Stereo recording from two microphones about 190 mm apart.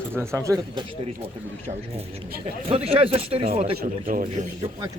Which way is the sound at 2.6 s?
30° right (ahead or behind).